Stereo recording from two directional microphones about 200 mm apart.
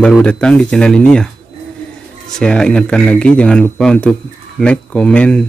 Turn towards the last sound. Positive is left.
turn(degrees=5)  # may be behind; listen again after turning